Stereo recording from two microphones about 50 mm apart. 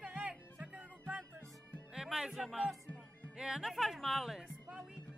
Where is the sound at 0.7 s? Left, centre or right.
Right.